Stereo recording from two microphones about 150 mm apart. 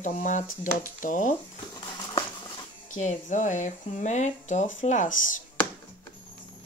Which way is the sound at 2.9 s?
55° left (ahead or behind).